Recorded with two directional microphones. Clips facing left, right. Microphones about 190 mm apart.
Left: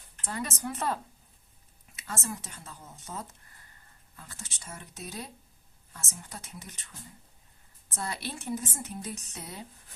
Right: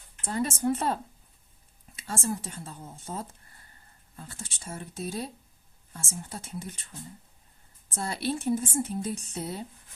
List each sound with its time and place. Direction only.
0.3 s a woman's voice: 30° right (ahead or behind)
2.0 s a woman's voice: 30° right (ahead or behind)
7.9 s a woman's voice: 30° right (ahead or behind)